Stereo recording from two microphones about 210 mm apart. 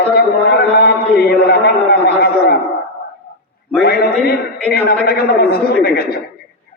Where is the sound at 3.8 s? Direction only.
45° left (ahead or behind).